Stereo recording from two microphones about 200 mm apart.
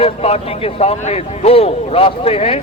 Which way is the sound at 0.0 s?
30° left (ahead or behind).